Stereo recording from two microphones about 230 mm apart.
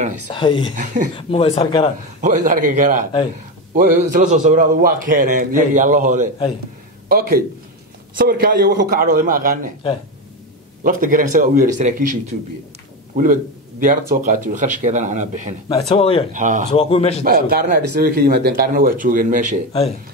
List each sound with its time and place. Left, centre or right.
0.3 s speech: left
2.2 s a man's voice: right
10.8 s a man's voice: right
15.9 s speech: left
16.3 s a man's voice: right
16.7 s speech: left
17.2 s a man's voice: right